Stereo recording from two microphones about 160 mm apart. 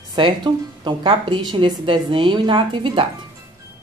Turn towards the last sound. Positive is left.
turn(degrees=-30)  # may be behind; listen again after turning